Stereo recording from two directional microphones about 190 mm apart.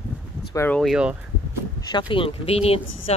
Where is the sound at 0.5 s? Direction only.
10° left (ahead or behind).